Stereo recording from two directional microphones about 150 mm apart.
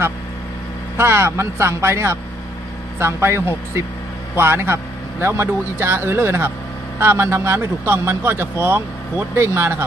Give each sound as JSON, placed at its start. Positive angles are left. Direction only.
{"t": 0.9, "sound": "speech", "side_deg": -15}